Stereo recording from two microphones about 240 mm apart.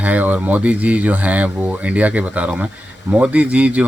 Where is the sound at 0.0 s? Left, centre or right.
Centre.